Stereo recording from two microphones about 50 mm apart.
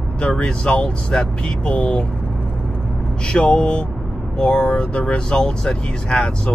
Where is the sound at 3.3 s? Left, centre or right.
Left.